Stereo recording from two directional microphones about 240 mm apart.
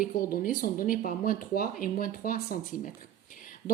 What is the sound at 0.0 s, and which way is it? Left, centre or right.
Speech, left.